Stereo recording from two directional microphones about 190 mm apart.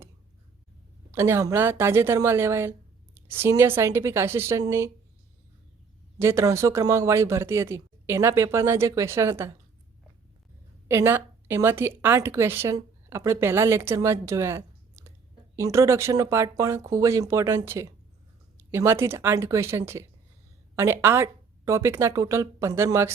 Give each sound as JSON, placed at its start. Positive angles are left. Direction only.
{"t": 1.1, "sound": "speech", "side_deg": -15}
{"t": 6.1, "sound": "speech", "side_deg": -15}
{"t": 10.8, "sound": "a woman's voice", "side_deg": -15}